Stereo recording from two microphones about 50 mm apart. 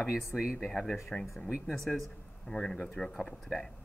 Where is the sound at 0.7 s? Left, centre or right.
Centre.